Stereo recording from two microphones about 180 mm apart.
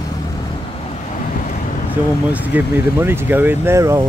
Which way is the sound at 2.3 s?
10° right (ahead or behind).